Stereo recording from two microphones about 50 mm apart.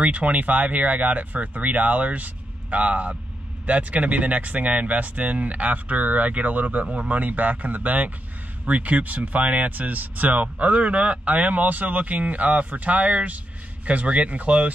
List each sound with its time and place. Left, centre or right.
0.0 s speech: right